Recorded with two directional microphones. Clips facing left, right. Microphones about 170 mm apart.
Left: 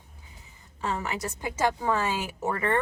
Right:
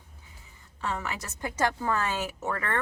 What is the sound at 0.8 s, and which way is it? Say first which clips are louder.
A woman's voice: left 3 dB; 20° left (ahead or behind).